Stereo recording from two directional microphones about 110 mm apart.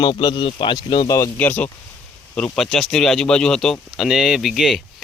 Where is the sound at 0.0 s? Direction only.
45° left (ahead or behind).